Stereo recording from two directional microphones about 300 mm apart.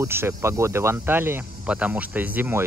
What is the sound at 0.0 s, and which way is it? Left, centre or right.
Speech, centre.